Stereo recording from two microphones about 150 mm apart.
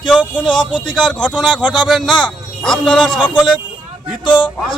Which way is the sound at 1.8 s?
5° left (ahead or behind).